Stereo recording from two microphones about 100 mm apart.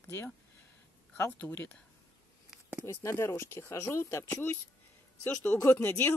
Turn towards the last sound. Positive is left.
turn(degrees=25)  # may be behind; listen again after turning